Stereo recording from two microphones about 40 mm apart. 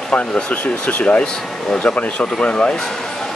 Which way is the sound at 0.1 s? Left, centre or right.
Left.